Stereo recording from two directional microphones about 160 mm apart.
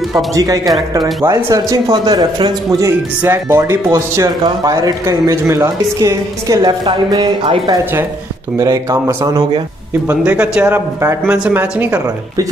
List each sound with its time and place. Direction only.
0.3 s speech: 20° right (ahead or behind)
3.2 s speech: 15° right (ahead or behind)
10.0 s speech: 10° right (ahead or behind)